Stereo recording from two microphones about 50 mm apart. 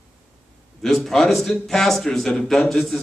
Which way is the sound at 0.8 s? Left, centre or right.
Centre.